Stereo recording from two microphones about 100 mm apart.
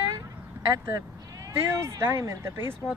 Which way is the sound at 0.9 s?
35° right (ahead or behind).